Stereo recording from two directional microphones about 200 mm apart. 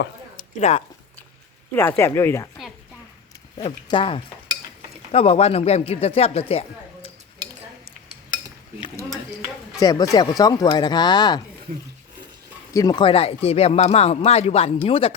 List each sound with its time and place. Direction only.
0.3 s a sound: 35° left (ahead or behind)
1.7 s speech: 10° left (ahead or behind)
3.6 s speech: 25° left (ahead or behind)
6.5 s a sound: 30° left (ahead or behind)
9.8 s speech: 20° left (ahead or behind)
12.7 s speech: 20° left (ahead or behind)